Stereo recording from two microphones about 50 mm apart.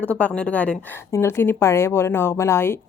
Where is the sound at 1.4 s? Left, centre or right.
Left.